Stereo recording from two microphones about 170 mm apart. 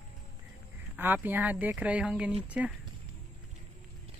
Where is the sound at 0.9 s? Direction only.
10° right (ahead or behind).